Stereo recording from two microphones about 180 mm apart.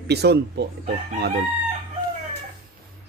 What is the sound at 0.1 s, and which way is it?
Speech, 65° right (ahead or behind).